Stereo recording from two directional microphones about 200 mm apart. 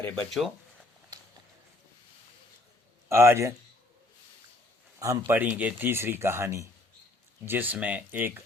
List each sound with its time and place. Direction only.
0.0 s speech: 5° left (ahead or behind)
3.1 s speech: 15° right (ahead or behind)
4.9 s speech: 15° right (ahead or behind)